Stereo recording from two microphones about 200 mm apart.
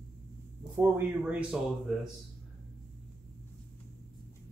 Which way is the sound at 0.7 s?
10° right (ahead or behind).